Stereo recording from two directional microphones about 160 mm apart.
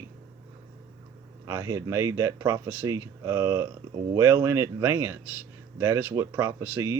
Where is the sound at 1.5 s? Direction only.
20° right (ahead or behind).